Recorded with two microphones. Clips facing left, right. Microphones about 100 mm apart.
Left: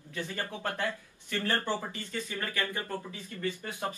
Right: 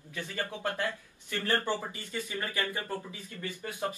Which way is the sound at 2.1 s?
15° right (ahead or behind).